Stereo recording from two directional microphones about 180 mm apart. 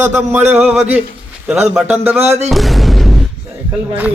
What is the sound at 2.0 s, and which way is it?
Speech, 35° right (ahead or behind).